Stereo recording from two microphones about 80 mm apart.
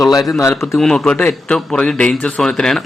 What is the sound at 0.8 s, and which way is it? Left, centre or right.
A man's voice, centre.